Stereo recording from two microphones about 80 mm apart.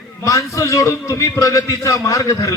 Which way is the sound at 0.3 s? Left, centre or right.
Left.